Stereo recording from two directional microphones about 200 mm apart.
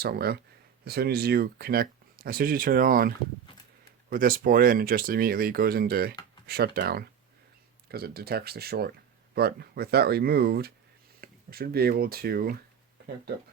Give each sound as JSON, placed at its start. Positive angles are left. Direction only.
{"t": 0.0, "sound": "speech", "side_deg": -50}
{"t": 4.1, "sound": "speech", "side_deg": -45}